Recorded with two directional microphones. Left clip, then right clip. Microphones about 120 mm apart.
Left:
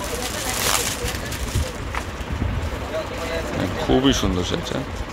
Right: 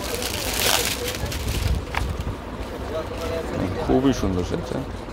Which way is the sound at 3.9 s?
Centre (ahead or behind).